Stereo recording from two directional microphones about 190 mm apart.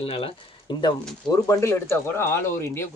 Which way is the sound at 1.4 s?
15° left (ahead or behind).